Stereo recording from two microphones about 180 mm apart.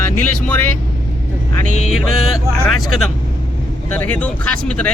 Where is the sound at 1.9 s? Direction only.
Centre (ahead or behind).